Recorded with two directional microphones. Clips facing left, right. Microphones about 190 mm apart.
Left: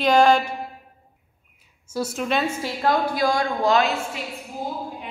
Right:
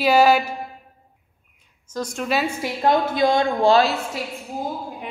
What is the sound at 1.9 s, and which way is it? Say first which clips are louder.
Speech: even; 5° left (ahead or behind).